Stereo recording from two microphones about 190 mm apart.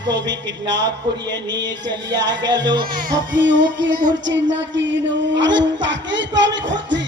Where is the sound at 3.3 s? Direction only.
70° right (ahead or behind).